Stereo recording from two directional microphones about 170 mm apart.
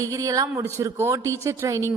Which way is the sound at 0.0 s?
20° right (ahead or behind).